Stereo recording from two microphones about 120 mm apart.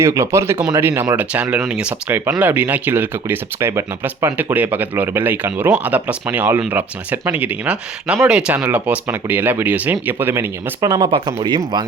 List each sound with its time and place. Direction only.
0.0 s speech: 25° right (ahead or behind)
10.8 s speech: 30° right (ahead or behind)
11.1 s speech: 45° right (ahead or behind)